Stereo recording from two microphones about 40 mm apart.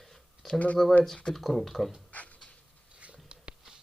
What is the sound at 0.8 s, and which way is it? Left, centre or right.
Speech, centre.